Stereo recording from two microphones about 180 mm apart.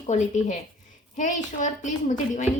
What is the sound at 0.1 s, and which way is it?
A woman's voice, 45° left (ahead or behind).